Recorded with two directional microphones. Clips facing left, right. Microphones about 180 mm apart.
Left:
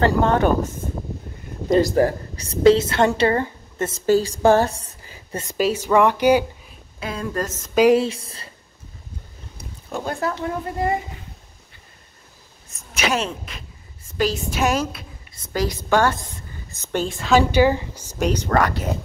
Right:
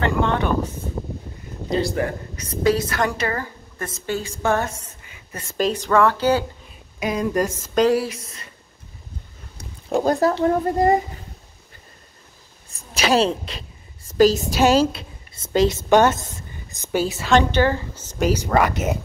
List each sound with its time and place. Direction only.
0.0 s speech: 40° left (ahead or behind)
1.7 s a woman's voice: 45° left (ahead or behind); by 4.0 s 25° left (ahead or behind)
4.0 s a woman's voice: 35° left (ahead or behind)
5.5 s speech: 10° left (ahead or behind)
7.0 s speech: 15° right (ahead or behind)
7.9 s a woman's voice: 25° left (ahead or behind)
9.8 s speech: 35° right (ahead or behind)
12.6 s a woman's voice: 35° right (ahead or behind); by 18.1 s 15° left (ahead or behind)
18.2 s speech: 10° right (ahead or behind)